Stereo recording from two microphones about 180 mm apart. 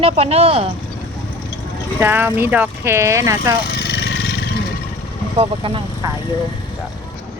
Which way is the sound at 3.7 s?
70° left (ahead or behind).